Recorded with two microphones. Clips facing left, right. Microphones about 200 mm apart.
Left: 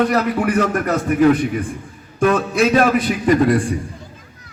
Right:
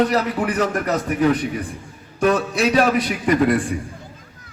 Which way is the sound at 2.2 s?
55° left (ahead or behind).